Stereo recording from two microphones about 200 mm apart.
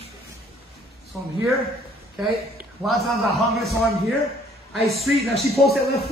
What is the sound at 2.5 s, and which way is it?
A man's voice, centre (ahead or behind).